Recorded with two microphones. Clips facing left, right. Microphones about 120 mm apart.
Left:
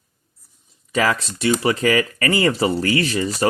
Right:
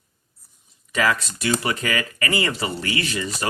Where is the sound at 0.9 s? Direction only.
30° left (ahead or behind).